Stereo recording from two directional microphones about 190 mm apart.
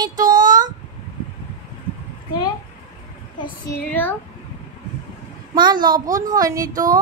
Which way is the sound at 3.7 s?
10° left (ahead or behind).